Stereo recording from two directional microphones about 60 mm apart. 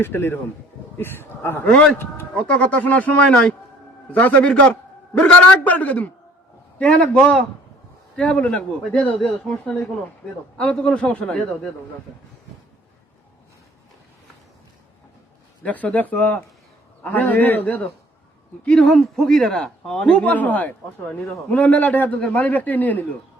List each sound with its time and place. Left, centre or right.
0.0 s speech: left
1.6 s a man's voice: centre
2.3 s a man's voice: left
15.6 s a man's voice: left
18.9 s a man's voice: centre
20.0 s a man's voice: left